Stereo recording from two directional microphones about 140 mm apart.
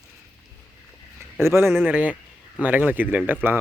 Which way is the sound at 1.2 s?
20° right (ahead or behind).